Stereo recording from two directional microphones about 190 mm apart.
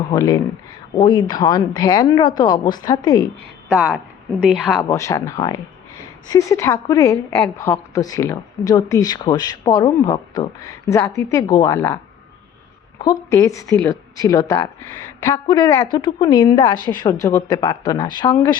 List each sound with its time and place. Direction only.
0.1 s a woman's voice: 20° left (ahead or behind)
3.7 s speech: 5° right (ahead or behind)
4.5 s a woman's voice: 10° left (ahead or behind)
13.0 s a woman's voice: 20° left (ahead or behind)